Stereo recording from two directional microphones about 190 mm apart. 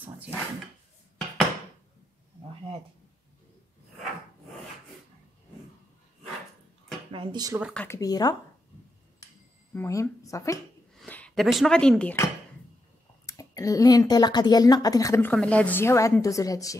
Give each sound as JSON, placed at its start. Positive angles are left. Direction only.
{"t": 7.1, "sound": "speech", "side_deg": -25}
{"t": 7.7, "sound": "speech", "side_deg": 10}
{"t": 9.8, "sound": "speech", "side_deg": 15}
{"t": 13.2, "sound": "speech", "side_deg": 15}